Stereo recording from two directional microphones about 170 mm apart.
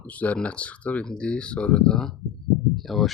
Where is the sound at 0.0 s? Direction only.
10° left (ahead or behind).